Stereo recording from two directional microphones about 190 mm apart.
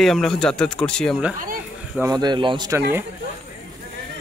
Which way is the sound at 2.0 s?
20° right (ahead or behind).